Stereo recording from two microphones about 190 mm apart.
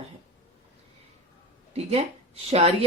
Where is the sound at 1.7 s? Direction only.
35° right (ahead or behind).